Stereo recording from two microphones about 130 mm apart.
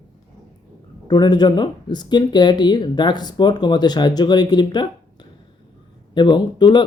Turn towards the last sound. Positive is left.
turn(degrees=35)  # may be behind; listen again after turning